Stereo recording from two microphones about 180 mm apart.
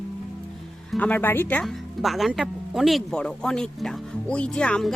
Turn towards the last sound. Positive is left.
turn(degrees=5)  # may be behind; listen again after turning